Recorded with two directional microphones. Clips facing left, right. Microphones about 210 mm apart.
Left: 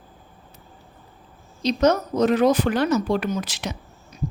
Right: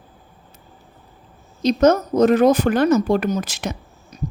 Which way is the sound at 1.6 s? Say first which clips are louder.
Right 4 dB; 45° right (ahead or behind).